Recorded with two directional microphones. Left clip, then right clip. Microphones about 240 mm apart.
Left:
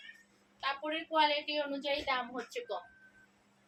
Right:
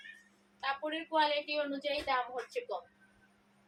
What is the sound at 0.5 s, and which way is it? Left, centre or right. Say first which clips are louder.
A woman's voice: even; centre.